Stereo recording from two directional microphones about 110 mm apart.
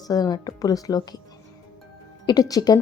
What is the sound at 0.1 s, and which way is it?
Speech, 35° left (ahead or behind).